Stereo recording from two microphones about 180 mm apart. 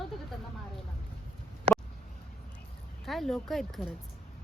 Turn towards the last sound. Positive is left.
turn(degrees=0)  # may be behind; listen again after turning